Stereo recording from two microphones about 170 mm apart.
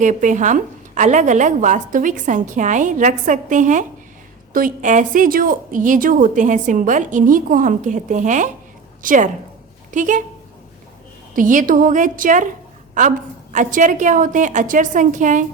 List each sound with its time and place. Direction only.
0.0 s a woman's voice: 45° right (ahead or behind)
11.3 s a woman's voice: 50° right (ahead or behind)